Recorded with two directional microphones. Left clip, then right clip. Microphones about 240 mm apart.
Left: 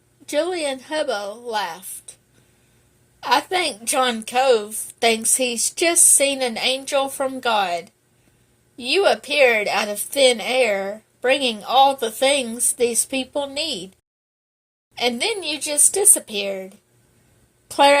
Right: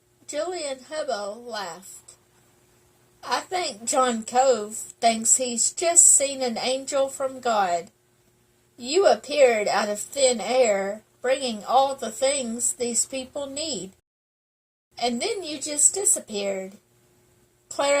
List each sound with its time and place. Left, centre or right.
0.3 s a woman's voice: left
3.2 s a woman's voice: left
8.8 s a woman's voice: left
15.2 s a woman's voice: left